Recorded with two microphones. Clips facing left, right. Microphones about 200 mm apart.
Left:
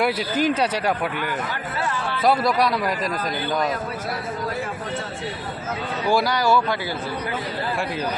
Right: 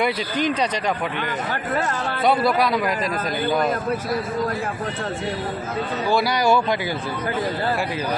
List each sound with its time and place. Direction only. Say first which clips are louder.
0.0 s speech: left 1 dB; 5° left (ahead or behind)
1.7 s speech: right 3 dB; 45° right (ahead or behind)
2.2 s speech: even; centre (ahead or behind)
6.2 s speech: right 1 dB; 15° right (ahead or behind)